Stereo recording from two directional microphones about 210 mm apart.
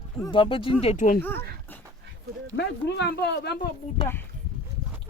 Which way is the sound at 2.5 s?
55° left (ahead or behind).